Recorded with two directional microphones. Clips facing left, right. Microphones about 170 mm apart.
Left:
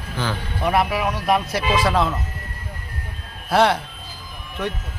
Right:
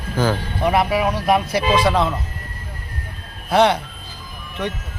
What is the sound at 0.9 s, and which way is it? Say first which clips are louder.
Speech: right 4 dB; 20° right (ahead or behind).